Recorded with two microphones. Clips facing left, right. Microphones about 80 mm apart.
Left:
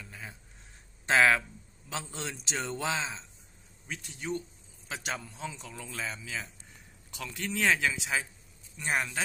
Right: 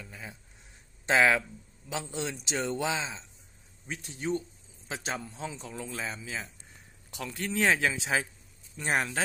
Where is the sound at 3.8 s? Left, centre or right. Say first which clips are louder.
Right 3 dB; right.